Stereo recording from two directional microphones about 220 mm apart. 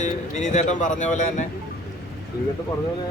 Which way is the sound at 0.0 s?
35° left (ahead or behind).